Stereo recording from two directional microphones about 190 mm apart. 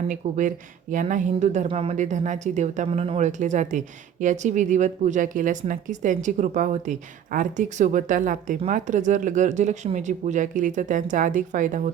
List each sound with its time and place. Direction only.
0.1 s speech: 40° right (ahead or behind)